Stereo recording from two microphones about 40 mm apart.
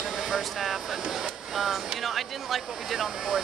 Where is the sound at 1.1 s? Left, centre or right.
Centre.